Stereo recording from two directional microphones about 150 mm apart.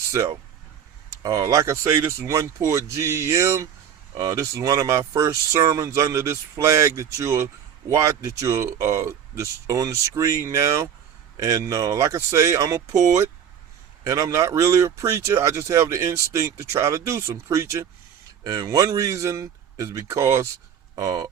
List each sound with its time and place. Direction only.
1.2 s speech: 20° right (ahead or behind)